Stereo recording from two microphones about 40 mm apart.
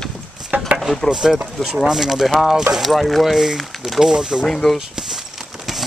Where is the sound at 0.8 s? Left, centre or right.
Centre.